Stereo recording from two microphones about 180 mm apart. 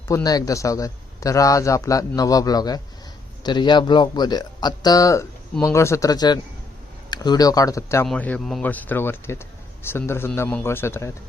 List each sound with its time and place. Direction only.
0.1 s a man's voice: 20° left (ahead or behind)